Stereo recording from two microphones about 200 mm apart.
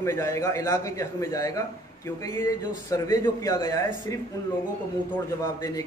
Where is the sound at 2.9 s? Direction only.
20° left (ahead or behind).